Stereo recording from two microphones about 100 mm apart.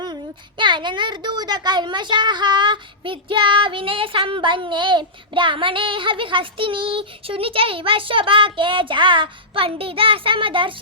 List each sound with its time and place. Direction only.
0.6 s a woman's voice: 50° right (ahead or behind)